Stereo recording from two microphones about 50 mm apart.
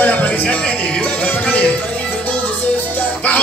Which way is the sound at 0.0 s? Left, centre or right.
Left.